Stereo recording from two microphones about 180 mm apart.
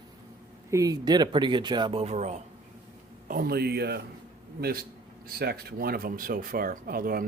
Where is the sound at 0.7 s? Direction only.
20° right (ahead or behind); by 2.4 s 40° right (ahead or behind).